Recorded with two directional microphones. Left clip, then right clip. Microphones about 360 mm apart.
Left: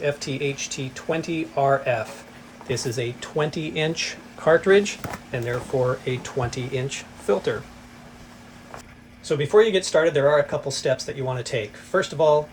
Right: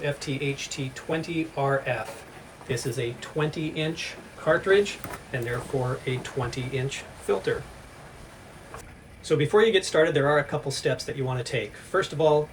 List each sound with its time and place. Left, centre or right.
0.0 s speech: centre
9.2 s speech: centre